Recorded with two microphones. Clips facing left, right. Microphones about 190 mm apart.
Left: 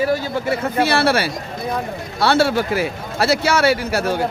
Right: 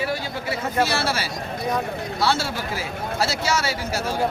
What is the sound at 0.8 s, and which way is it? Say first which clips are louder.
A man's voice: left 7 dB; 60° left (ahead or behind).